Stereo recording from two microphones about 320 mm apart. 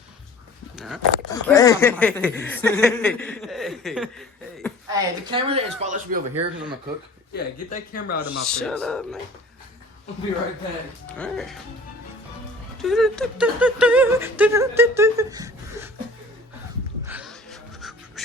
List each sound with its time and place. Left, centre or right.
1.3 s speech: centre
4.9 s speech: centre
7.3 s speech: left
8.2 s speech: centre
11.2 s speech: centre
12.8 s speech: centre
17.1 s music: centre